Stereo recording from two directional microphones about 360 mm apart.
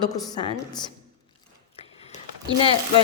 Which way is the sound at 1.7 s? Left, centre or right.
Centre.